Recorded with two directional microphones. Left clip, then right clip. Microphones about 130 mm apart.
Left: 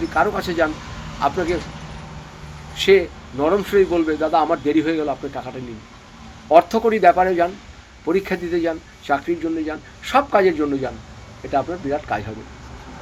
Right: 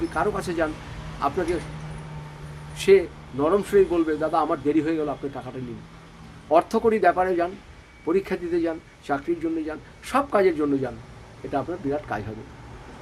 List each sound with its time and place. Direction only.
0.1 s speech: 20° right (ahead or behind)
2.7 s speech: 30° right (ahead or behind)